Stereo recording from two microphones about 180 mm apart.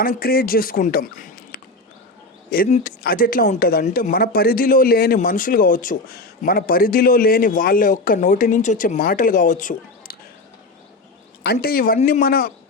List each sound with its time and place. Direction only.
0.0 s a man's voice: 55° left (ahead or behind)
2.6 s speech: 35° left (ahead or behind)
3.0 s a man's voice: 55° left (ahead or behind)
11.6 s a man's voice: 55° left (ahead or behind)